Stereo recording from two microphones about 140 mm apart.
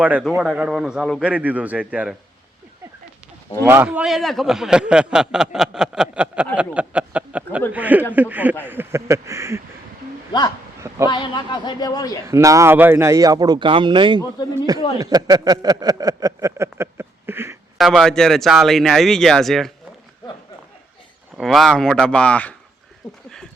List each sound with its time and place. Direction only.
0.0 s speech: 5° right (ahead or behind)
3.8 s speech: 5° right (ahead or behind); by 9.6 s 20° right (ahead or behind)
10.3 s a man's voice: 30° left (ahead or behind)
10.8 s a sound: 20° right (ahead or behind)
11.0 s a man's voice: 30° left (ahead or behind)
12.2 s speech: 20° right (ahead or behind)
17.7 s speech: centre (ahead or behind)
21.3 s speech: centre (ahead or behind)